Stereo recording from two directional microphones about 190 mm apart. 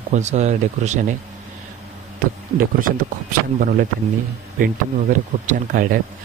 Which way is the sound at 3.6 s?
45° right (ahead or behind).